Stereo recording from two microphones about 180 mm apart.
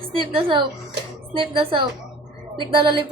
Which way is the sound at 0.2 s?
30° right (ahead or behind).